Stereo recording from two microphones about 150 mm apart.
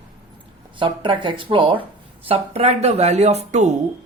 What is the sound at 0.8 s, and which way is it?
Speech, 35° right (ahead or behind).